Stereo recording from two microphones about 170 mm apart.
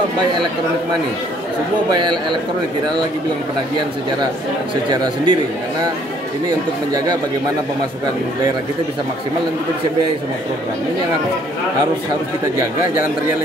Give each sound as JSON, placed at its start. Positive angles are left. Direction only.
{"t": 1.9, "sound": "a man's voice", "side_deg": -25}
{"t": 4.8, "sound": "a man's voice", "side_deg": -25}